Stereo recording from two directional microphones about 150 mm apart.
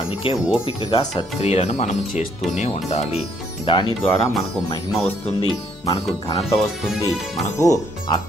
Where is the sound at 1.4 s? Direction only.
45° left (ahead or behind).